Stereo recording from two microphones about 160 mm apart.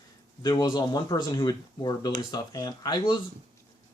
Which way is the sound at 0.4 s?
25° left (ahead or behind).